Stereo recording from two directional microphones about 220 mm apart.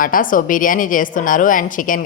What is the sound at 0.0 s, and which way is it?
A woman's voice, 40° left (ahead or behind).